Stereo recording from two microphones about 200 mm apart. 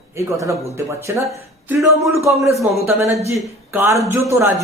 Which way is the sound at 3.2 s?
10° right (ahead or behind).